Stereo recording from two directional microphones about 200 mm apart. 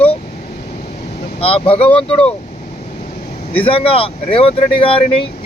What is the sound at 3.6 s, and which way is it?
Speech, 30° left (ahead or behind).